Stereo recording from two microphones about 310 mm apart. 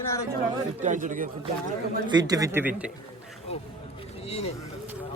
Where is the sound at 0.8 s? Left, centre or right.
Right.